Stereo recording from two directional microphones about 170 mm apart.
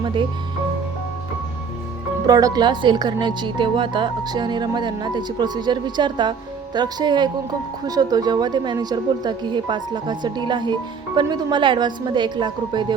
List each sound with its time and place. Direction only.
2.2 s a woman's voice: 20° right (ahead or behind)